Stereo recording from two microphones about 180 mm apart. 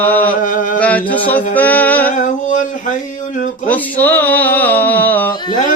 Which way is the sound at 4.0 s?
10° left (ahead or behind).